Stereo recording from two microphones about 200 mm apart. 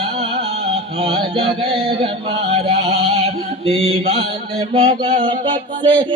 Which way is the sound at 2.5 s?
30° right (ahead or behind).